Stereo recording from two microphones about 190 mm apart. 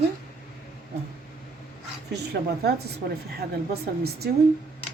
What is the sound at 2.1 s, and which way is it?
Speech, 60° right (ahead or behind).